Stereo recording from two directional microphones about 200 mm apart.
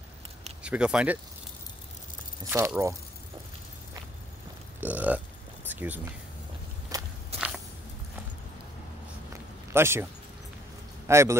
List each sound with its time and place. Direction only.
0.6 s speech: 5° right (ahead or behind)
2.5 s speech: 15° right (ahead or behind)
4.7 s speech: 10° right (ahead or behind)
5.7 s a sound: 10° right (ahead or behind)
6.9 s walk: 15° right (ahead or behind)
7.3 s biting: 5° right (ahead or behind)
9.7 s speech: 10° right (ahead or behind)
11.1 s speech: 15° right (ahead or behind)